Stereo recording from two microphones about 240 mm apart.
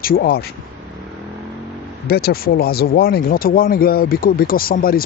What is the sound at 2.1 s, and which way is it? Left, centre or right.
Speech, left.